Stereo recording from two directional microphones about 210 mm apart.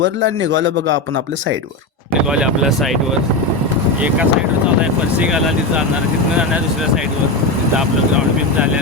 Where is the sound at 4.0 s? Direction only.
5° right (ahead or behind).